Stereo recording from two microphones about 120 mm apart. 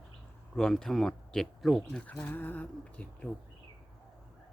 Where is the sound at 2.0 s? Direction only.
10° left (ahead or behind).